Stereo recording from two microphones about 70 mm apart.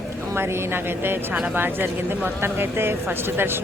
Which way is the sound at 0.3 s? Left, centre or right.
Right.